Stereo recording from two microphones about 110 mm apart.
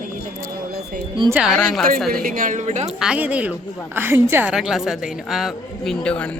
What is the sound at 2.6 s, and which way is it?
Speech, 85° right.